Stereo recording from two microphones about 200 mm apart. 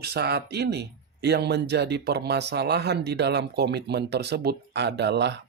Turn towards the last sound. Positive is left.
turn(degrees=-60)  # may be behind; listen again after turning